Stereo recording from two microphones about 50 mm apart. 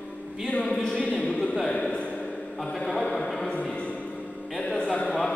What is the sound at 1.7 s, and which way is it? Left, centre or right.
Speech, left.